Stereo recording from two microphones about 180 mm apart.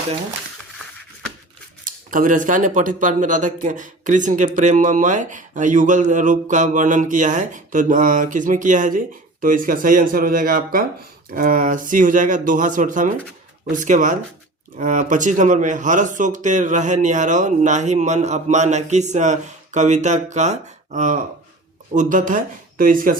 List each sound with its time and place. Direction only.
1.8 s speech: 50° right (ahead or behind)